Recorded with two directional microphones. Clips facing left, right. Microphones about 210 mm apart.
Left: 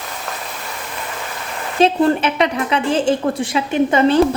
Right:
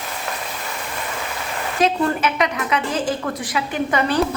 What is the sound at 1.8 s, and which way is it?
A woman's voice, 30° left (ahead or behind).